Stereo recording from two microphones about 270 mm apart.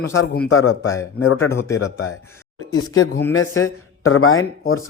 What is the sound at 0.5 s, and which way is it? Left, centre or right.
Speech, left.